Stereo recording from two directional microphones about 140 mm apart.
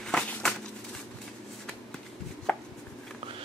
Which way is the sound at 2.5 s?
10° left (ahead or behind).